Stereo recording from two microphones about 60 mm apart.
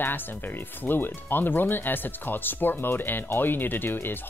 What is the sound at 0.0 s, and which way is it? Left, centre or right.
Speech, left.